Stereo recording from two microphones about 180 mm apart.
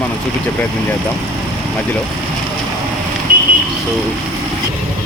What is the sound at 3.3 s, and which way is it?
Vehicle, 55° right (ahead or behind).